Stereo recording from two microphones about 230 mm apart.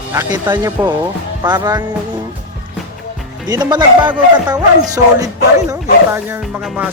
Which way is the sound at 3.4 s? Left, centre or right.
Centre.